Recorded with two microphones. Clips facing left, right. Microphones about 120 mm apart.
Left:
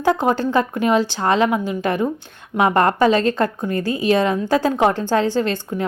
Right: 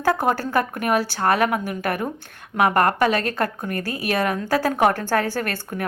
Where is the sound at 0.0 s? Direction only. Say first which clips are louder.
Left 3 dB; 20° left (ahead or behind).